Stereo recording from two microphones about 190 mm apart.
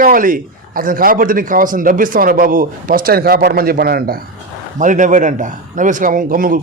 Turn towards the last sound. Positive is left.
turn(degrees=-45)  # may be behind; listen again after turning